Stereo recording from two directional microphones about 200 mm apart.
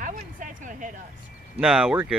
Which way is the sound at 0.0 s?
40° right (ahead or behind).